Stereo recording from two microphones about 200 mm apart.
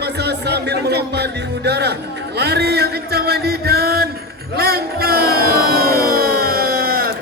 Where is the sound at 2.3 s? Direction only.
55° right (ahead or behind).